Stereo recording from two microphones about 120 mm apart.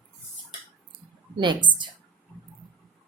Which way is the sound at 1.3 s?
40° right (ahead or behind).